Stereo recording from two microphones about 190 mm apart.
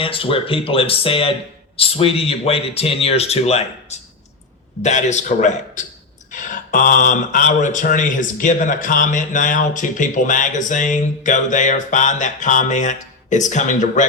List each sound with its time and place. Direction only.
0.0 s speech: 30° left (ahead or behind)